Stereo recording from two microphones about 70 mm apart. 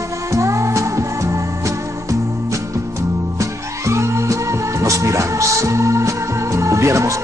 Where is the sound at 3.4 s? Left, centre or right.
Right.